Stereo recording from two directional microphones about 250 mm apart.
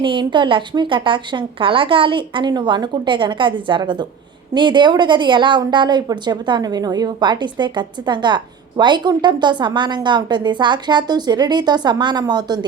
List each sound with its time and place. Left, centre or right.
0.0 s a woman's voice: centre